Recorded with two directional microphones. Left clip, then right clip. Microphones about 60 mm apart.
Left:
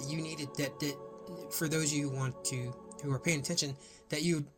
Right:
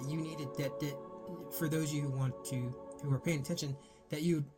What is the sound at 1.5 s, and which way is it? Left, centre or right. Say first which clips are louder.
A man's voice: left 3 dB; left.